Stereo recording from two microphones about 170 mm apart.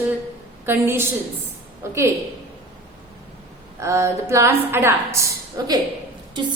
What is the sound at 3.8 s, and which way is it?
A woman's voice, 15° right (ahead or behind).